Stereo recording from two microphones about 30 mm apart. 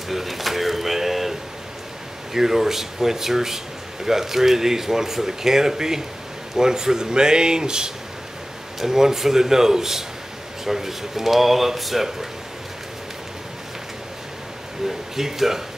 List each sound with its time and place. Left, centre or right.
0.1 s speech: centre
2.3 s speech: centre
14.9 s speech: centre